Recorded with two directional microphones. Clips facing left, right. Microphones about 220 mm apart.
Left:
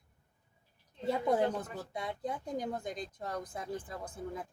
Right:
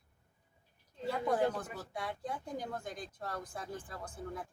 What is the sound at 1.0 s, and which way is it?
Speech, 20° left (ahead or behind).